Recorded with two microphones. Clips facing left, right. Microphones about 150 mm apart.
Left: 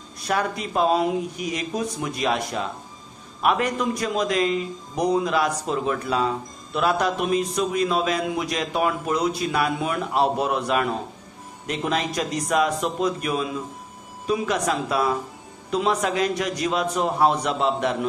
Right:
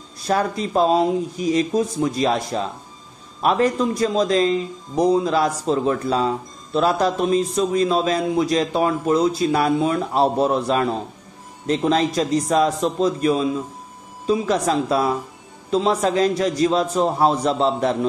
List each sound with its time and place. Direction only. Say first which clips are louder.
0.2 s a man's voice: right 4 dB; 35° right (ahead or behind)